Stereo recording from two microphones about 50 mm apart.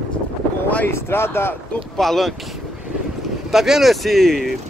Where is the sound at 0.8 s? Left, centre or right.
Left.